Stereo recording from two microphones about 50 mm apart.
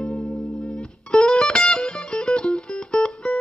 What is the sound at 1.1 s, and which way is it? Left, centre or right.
Music, centre.